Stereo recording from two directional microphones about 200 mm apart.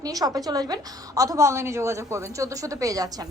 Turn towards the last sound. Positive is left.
turn(degrees=-15)  # may be behind; listen again after turning